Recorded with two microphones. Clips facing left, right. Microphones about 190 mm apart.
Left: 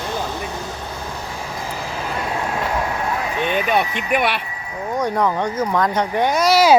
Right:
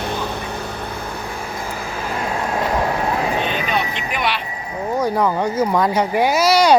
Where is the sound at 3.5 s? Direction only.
55° left (ahead or behind).